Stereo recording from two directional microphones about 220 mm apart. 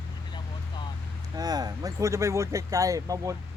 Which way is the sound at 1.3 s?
15° right (ahead or behind).